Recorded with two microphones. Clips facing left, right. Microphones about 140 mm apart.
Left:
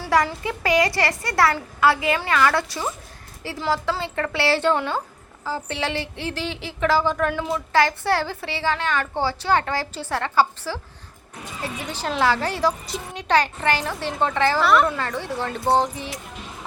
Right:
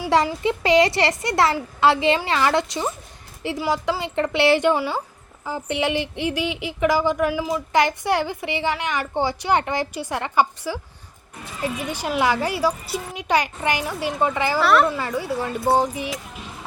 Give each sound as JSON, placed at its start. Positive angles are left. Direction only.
{"t": 0.1, "sound": "speech", "side_deg": -25}